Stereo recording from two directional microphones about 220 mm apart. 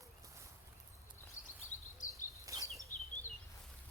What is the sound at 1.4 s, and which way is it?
Bird, 35° left (ahead or behind).